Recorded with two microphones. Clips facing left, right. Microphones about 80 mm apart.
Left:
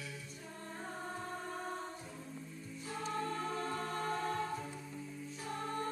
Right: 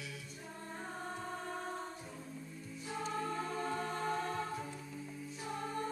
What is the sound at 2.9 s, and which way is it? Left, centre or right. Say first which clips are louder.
Music: even; centre.